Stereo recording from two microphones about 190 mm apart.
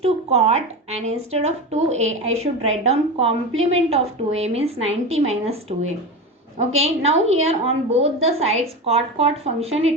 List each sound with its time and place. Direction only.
0.0 s speech: 35° right (ahead or behind)